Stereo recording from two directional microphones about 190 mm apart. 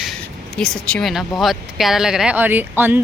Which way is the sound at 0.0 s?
Centre (ahead or behind).